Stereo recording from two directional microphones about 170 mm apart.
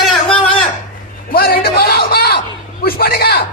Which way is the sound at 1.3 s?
60° left (ahead or behind).